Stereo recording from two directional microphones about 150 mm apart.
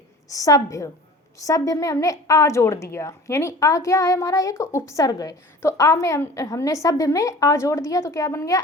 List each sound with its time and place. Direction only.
0.3 s a woman's voice: 25° left (ahead or behind)